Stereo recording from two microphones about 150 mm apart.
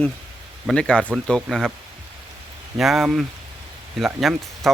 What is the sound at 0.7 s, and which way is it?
Speech, 5° left (ahead or behind).